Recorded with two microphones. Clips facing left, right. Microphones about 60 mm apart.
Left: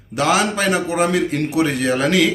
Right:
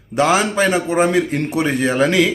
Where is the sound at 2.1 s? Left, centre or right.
Right.